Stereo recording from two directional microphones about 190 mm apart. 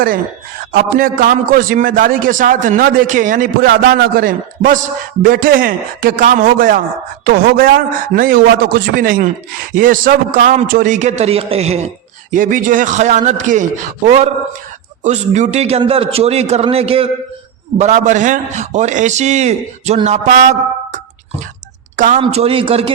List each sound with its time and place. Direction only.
0.7 s a man's voice: 50° right (ahead or behind)
12.3 s a man's voice: 45° right (ahead or behind)
22.2 s speech: 30° right (ahead or behind)